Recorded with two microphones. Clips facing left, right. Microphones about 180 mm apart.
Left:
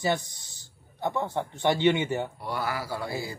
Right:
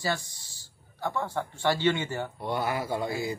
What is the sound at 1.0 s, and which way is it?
Speech, 20° left (ahead or behind).